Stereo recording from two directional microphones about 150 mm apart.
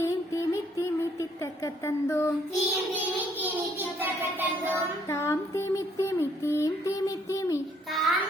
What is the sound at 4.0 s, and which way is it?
Music, 10° right (ahead or behind).